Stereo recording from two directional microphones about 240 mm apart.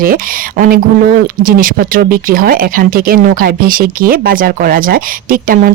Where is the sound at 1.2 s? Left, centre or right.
Right.